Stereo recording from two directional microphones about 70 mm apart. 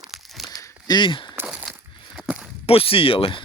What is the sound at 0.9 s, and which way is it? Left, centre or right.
Speech, left.